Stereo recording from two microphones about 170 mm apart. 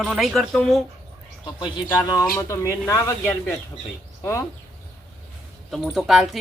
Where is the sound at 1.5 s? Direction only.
25° left (ahead or behind).